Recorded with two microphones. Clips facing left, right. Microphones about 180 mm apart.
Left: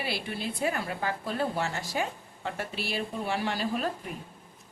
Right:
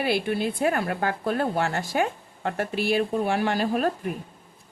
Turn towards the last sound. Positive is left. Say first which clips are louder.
# right 6 dB
turn(degrees=-55)  # may be behind; listen again after turning